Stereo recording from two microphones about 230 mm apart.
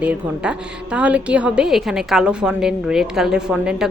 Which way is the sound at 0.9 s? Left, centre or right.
Centre.